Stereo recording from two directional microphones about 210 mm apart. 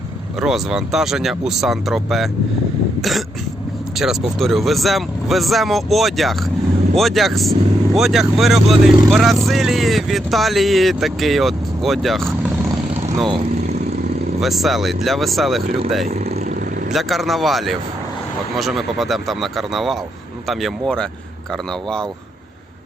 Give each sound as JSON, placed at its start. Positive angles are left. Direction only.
{"t": 0.3, "sound": "speech", "side_deg": 0}
{"t": 3.0, "sound": "cough", "side_deg": 0}
{"t": 3.9, "sound": "speech", "side_deg": 0}
{"t": 14.4, "sound": "speech", "side_deg": 0}
{"t": 16.1, "sound": "vehicle", "side_deg": -30}
{"t": 16.9, "sound": "speech", "side_deg": 0}